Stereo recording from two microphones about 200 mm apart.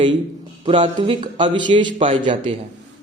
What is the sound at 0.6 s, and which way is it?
A man's voice, 25° right (ahead or behind).